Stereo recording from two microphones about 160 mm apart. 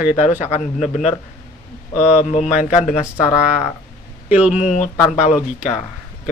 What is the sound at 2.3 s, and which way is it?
Speech, 45° left (ahead or behind).